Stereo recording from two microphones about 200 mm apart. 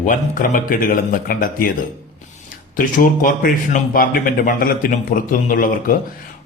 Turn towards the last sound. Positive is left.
turn(degrees=45)  # may be behind; listen again after turning